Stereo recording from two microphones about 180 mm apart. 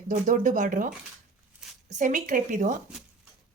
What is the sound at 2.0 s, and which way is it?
Speech, 45° right (ahead or behind).